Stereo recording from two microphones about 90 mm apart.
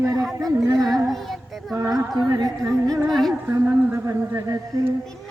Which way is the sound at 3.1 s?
5° left (ahead or behind).